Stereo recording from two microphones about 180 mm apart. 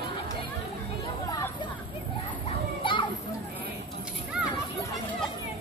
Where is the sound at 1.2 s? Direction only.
20° left (ahead or behind).